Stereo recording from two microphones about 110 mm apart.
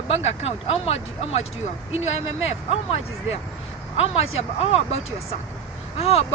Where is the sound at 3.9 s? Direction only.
70° left (ahead or behind).